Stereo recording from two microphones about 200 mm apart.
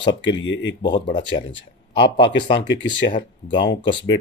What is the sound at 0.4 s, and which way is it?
Speech, 70° left (ahead or behind).